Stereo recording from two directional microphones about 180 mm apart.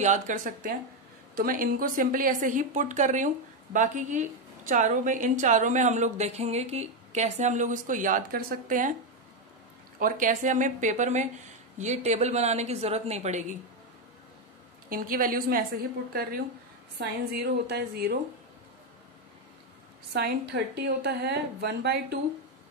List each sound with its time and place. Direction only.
0.0 s a woman's voice: 45° right (ahead or behind)
9.9 s a woman's voice: 50° right (ahead or behind)
14.9 s a woman's voice: 50° right (ahead or behind)
20.1 s a woman's voice: 65° right (ahead or behind)